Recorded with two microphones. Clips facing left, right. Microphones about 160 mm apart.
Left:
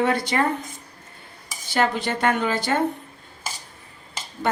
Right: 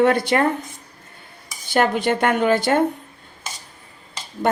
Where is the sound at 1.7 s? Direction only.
55° right (ahead or behind).